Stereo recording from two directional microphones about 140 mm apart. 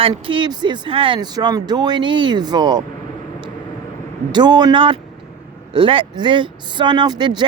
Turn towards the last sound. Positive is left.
turn(degrees=-30)  # may be behind; listen again after turning